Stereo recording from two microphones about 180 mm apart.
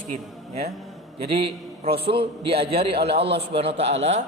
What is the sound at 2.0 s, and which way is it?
Speech, 30° right (ahead or behind).